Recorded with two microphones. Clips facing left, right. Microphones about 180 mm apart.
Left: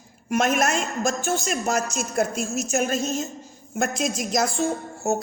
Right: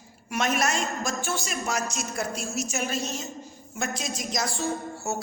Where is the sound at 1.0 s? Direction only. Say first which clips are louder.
Left 6 dB; 45° left (ahead or behind).